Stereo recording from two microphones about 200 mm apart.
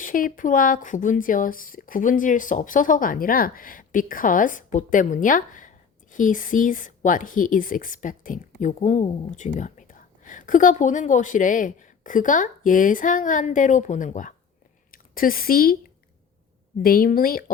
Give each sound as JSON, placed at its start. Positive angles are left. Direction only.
{"t": 0.0, "sound": "speech", "side_deg": 45}
{"t": 16.8, "sound": "a woman's voice", "side_deg": 45}